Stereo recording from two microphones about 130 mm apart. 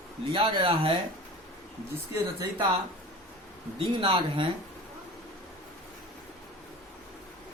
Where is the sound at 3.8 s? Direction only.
45° right (ahead or behind).